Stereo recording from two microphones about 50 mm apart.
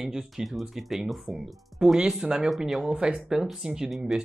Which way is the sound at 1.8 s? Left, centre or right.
Centre.